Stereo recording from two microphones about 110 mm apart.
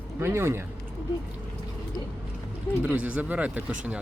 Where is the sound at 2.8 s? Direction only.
10° right (ahead or behind).